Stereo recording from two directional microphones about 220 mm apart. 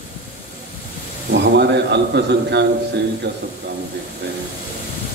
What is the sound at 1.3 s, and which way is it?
A man's voice, 50° right (ahead or behind).